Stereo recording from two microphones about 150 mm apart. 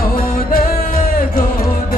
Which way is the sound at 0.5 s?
75° left (ahead or behind).